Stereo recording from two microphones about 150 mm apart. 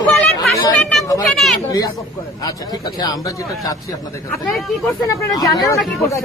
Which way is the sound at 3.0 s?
25° left (ahead or behind).